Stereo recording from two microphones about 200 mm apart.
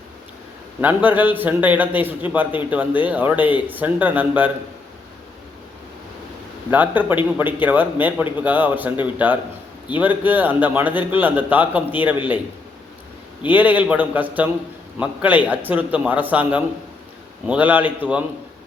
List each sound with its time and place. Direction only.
0.8 s a man's voice: 10° right (ahead or behind)
6.7 s a man's voice: 10° right (ahead or behind)
13.5 s a man's voice: 10° right (ahead or behind)